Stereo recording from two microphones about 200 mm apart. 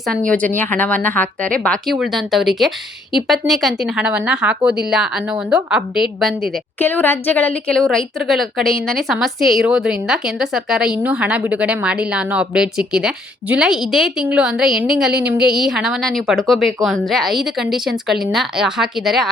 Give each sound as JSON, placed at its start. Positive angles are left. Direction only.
{"t": 0.0, "sound": "a woman's voice", "side_deg": 5}